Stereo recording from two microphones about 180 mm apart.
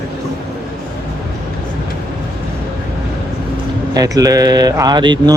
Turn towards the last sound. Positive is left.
turn(degrees=-25)  # may be behind; listen again after turning